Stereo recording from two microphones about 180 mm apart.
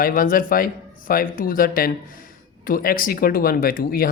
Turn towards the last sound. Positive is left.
turn(degrees=55)  # may be behind; listen again after turning